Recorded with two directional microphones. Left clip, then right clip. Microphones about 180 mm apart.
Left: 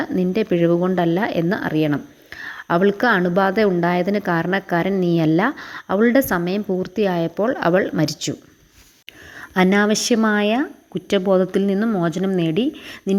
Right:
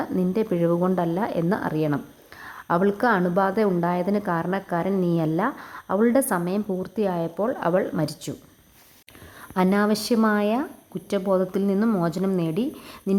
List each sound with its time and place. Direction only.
0.0 s speech: 15° left (ahead or behind)
9.4 s a woman's voice: 20° left (ahead or behind)